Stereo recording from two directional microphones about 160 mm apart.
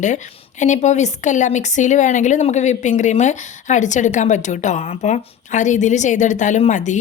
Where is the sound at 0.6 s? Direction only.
50° left (ahead or behind).